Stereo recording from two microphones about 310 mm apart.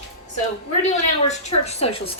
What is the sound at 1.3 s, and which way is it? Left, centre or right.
Speech, left.